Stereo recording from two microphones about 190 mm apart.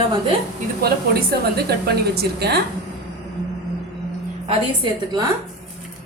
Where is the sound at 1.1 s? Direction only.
55° right (ahead or behind).